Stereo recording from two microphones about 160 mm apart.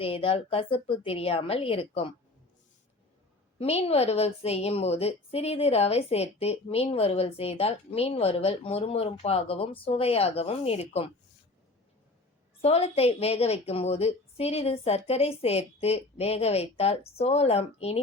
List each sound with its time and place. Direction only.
0.0 s a woman's voice: 35° left (ahead or behind)
3.6 s a woman's voice: 40° left (ahead or behind)
12.6 s a woman's voice: 40° left (ahead or behind)